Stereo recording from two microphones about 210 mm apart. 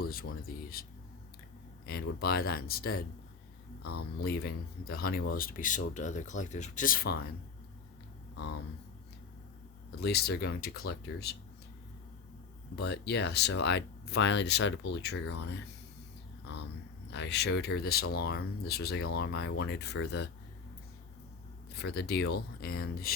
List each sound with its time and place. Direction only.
0.0 s speech: 45° left (ahead or behind)
1.9 s speech: 45° left (ahead or behind)
10.0 s speech: 50° left (ahead or behind)
12.7 s speech: 50° left (ahead or behind)
17.1 s speech: 55° left (ahead or behind)
21.8 s speech: 50° left (ahead or behind)